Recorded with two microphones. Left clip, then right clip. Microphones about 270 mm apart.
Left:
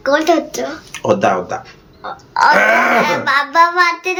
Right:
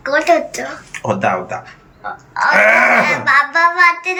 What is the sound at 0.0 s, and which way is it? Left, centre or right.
A child's voice, centre.